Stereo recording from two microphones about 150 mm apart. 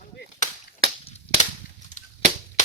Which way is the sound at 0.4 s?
55° left (ahead or behind).